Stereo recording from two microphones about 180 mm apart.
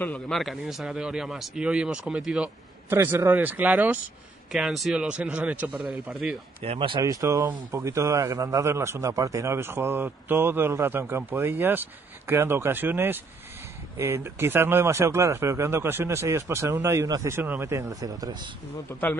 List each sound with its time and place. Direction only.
0.0 s a man's voice: 5° left (ahead or behind)
6.6 s speech: 30° right (ahead or behind)
18.9 s speech: 10° left (ahead or behind)